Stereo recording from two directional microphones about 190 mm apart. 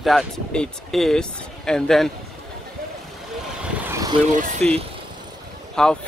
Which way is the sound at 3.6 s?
10° right (ahead or behind).